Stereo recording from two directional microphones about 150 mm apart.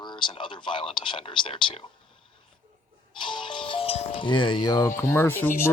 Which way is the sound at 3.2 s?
30° left (ahead or behind).